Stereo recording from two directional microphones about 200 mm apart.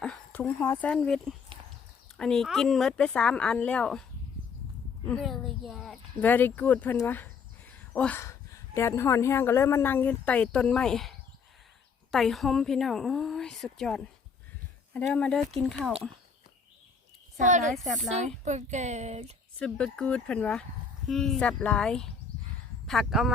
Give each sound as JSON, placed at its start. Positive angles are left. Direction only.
{"t": 0.0, "sound": "a woman's voice", "side_deg": 5}
{"t": 5.0, "sound": "speech", "side_deg": 0}
{"t": 12.1, "sound": "a woman's voice", "side_deg": 0}
{"t": 17.3, "sound": "music", "side_deg": -40}
{"t": 19.5, "sound": "a woman's voice", "side_deg": 5}